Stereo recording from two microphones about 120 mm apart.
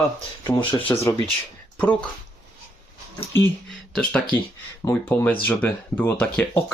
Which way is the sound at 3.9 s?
10° left (ahead or behind).